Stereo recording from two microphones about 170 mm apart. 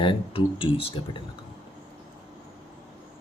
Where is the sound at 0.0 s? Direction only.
30° left (ahead or behind).